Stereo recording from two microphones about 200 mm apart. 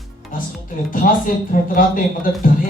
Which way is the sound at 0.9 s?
45° left (ahead or behind).